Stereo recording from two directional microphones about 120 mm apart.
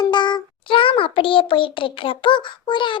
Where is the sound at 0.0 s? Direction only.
40° left (ahead or behind).